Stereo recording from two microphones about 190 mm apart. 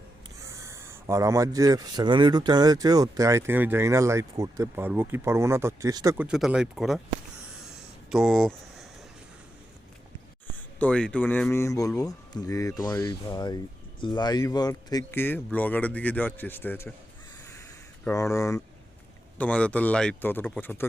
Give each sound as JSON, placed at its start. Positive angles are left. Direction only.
{"t": 0.4, "sound": "speech", "side_deg": -15}
{"t": 6.1, "sound": "speech", "side_deg": -5}
{"t": 7.6, "sound": "a sound", "side_deg": 0}
{"t": 10.8, "sound": "speech", "side_deg": 5}
{"t": 18.0, "sound": "speech", "side_deg": 15}